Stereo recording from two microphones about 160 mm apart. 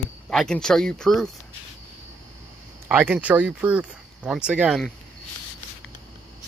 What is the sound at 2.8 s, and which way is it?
Speech, 10° right (ahead or behind).